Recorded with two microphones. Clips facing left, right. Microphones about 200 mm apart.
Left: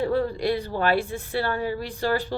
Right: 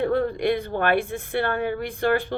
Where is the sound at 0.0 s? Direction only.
55° right (ahead or behind).